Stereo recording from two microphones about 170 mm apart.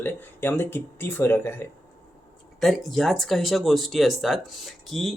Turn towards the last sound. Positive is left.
turn(degrees=0)  # may be behind; listen again after turning